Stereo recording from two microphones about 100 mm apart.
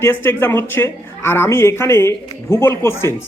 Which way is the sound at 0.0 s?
20° left (ahead or behind).